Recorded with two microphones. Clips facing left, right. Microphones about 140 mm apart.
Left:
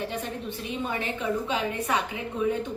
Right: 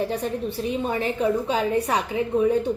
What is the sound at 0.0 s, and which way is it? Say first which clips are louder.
A woman's voice: right 7 dB; 35° right (ahead or behind).